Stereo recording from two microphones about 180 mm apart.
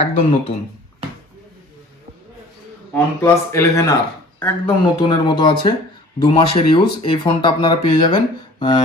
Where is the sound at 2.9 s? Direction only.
15° left (ahead or behind).